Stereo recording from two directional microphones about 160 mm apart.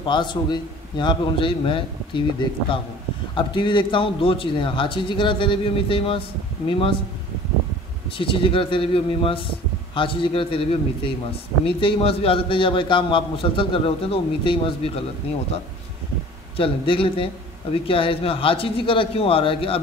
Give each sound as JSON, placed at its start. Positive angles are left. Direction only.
{"t": 0.0, "sound": "a man's voice", "side_deg": 30}
{"t": 3.3, "sound": "a man's voice", "side_deg": 30}
{"t": 8.2, "sound": "a man's voice", "side_deg": 35}
{"t": 16.5, "sound": "a man's voice", "side_deg": 35}